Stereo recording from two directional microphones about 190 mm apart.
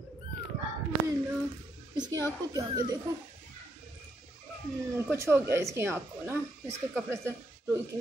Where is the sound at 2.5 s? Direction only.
20° right (ahead or behind).